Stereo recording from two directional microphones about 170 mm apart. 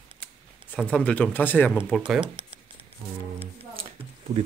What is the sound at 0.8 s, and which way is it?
Speech, 5° left (ahead or behind).